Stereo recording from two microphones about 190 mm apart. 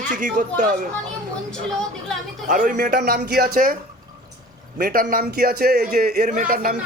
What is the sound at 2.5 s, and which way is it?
A man's voice, 45° right (ahead or behind).